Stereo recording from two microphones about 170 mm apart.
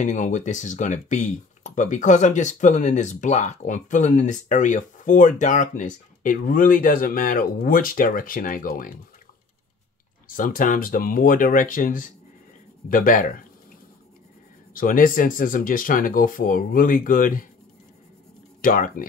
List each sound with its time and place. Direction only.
0.0 s speech: 45° left (ahead or behind)
10.2 s speech: 55° left (ahead or behind)
14.7 s speech: 55° left (ahead or behind)
18.6 s speech: 55° left (ahead or behind)